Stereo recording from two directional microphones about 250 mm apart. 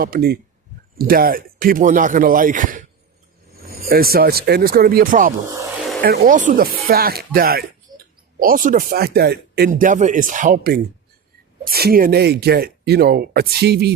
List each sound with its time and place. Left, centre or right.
0.0 s speech: right